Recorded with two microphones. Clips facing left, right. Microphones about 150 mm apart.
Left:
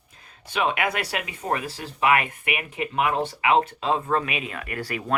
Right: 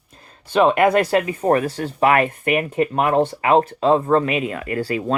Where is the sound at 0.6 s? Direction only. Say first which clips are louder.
Right 10 dB; 45° right (ahead or behind).